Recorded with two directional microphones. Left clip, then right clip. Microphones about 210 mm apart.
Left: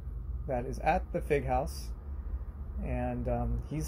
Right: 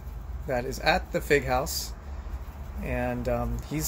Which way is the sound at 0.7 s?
10° right (ahead or behind).